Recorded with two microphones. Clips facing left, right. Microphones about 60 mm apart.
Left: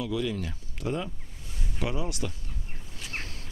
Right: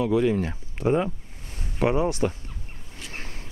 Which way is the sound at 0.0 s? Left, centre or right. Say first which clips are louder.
Right 8 dB; right.